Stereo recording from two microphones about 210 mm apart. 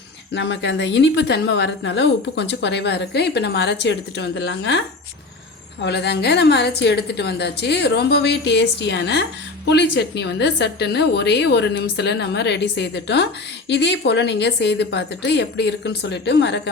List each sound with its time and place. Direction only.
0.3 s a woman's voice: 60° left (ahead or behind)
5.8 s a woman's voice: 55° left (ahead or behind)